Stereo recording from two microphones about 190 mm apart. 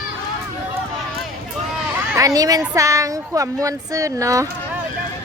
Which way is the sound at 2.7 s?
15° right (ahead or behind).